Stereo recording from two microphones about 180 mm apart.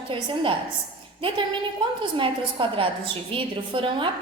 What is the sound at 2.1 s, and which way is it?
A woman's voice, 30° right (ahead or behind).